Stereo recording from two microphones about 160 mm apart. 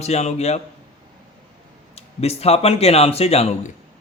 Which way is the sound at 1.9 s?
40° left (ahead or behind).